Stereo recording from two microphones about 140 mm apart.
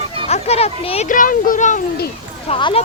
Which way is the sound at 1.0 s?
70° left (ahead or behind).